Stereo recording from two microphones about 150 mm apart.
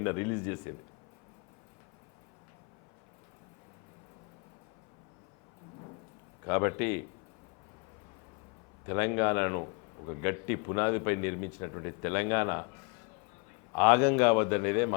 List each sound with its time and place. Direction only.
0.0 s a man's voice: 20° left (ahead or behind)
6.4 s a man's voice: 20° left (ahead or behind)
8.9 s a man's voice: 15° left (ahead or behind)
13.7 s a man's voice: 15° left (ahead or behind)